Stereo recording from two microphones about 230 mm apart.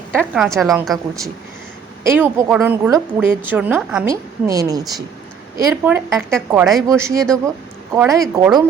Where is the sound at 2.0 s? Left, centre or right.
Centre.